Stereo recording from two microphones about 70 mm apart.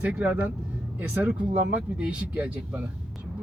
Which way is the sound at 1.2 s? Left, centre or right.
Centre.